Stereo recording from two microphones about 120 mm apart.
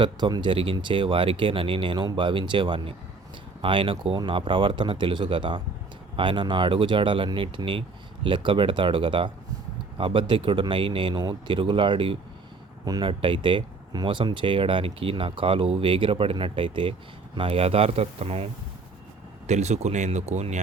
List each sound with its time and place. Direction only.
0.0 s a man's voice: 40° right (ahead or behind); by 18.4 s 60° right (ahead or behind)
19.5 s speech: 70° right (ahead or behind)